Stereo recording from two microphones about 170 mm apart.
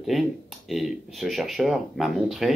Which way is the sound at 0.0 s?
Centre (ahead or behind).